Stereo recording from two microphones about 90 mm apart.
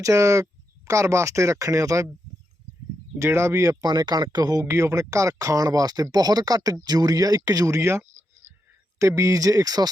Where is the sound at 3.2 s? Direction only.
30° right (ahead or behind); by 4.6 s 45° right (ahead or behind).